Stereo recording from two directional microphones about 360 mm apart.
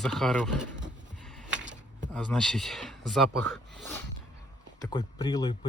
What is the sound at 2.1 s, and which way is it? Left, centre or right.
Speech, centre.